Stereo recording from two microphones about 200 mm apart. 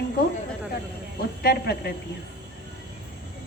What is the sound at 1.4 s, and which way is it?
Speech, 50° left (ahead or behind).